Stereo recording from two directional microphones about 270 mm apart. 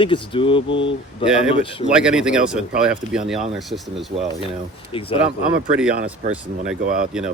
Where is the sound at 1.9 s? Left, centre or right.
Centre.